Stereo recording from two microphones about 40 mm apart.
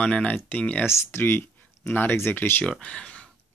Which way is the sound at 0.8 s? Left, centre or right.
Left.